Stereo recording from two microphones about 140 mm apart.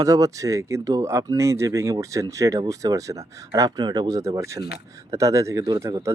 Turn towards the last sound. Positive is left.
turn(degrees=-20)  # may be behind; listen again after turning